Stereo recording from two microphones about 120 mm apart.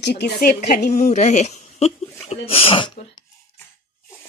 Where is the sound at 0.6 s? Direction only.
80° left; by 2.9 s 45° left (ahead or behind).